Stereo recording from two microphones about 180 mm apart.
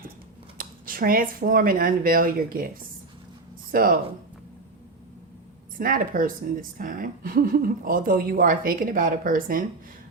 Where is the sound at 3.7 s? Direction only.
50° right (ahead or behind).